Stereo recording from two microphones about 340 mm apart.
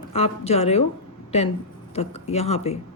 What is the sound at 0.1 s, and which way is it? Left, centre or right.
Speech, centre.